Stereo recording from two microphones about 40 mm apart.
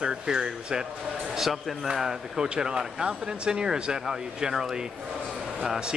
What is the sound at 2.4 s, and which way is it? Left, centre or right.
Speech, centre.